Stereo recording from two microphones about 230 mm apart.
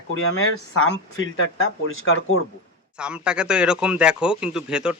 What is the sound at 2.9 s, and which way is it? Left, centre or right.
A man's voice, centre.